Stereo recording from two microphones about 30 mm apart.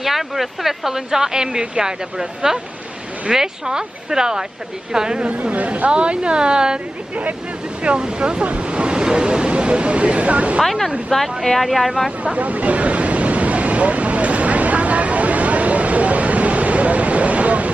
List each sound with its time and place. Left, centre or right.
0.0 s speech: centre; by 5.2 s right
5.3 s speech: right
5.9 s a woman's voice: right
7.9 s a woman's voice: right
10.6 s speech: centre
12.2 s a sound: right